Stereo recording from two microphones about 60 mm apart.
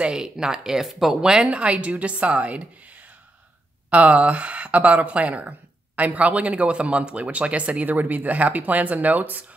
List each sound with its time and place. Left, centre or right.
0.0 s speech: centre